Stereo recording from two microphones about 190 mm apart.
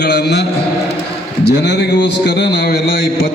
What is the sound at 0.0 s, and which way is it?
Speech, 60° left (ahead or behind).